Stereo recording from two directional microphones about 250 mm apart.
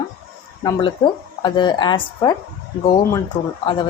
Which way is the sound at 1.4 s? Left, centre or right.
Centre.